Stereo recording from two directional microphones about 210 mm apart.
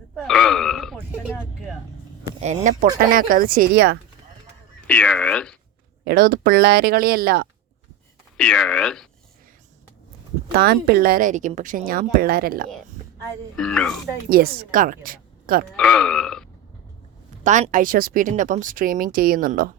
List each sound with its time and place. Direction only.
0.2 s grunt: centre (ahead or behind)
2.7 s a woman's voice: 35° right (ahead or behind)
4.9 s burping: 5° left (ahead or behind)
6.1 s a woman's voice: 45° right (ahead or behind)
8.4 s burping: 5° left (ahead or behind)
10.5 s a woman's voice: 45° right (ahead or behind)
13.6 s burping: centre (ahead or behind)
14.3 s a woman's voice: 45° right (ahead or behind)
15.7 s burping: 5° left (ahead or behind)
17.4 s speech: 35° right (ahead or behind)